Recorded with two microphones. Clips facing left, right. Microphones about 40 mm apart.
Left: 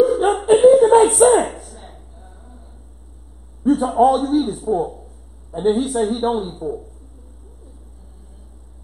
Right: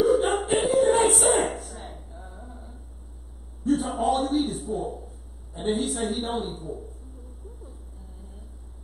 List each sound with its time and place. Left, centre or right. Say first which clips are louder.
0.0 s a sound: left 5 dB; centre
0.5 s chuckle: left 13 dB; centre
1.3 s a sound: left 8 dB; centre
3.6 s a man's voice: left 10 dB; centre
5.5 s a woman's voice: left 9 dB; centre
5.8 s a man's voice: left 8 dB; centre